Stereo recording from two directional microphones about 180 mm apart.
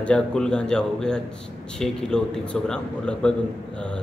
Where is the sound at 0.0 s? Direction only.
5° left (ahead or behind).